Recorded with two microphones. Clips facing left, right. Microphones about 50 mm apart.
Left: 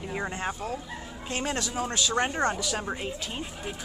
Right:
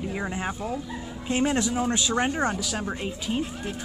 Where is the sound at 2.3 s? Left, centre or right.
Centre.